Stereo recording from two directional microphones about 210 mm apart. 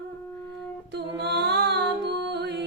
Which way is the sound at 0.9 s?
50° right (ahead or behind).